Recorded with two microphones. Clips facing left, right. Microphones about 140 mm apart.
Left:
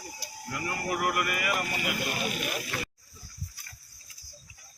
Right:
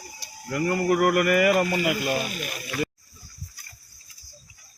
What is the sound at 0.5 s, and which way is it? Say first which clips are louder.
Speech: right 10 dB; 50° right (ahead or behind).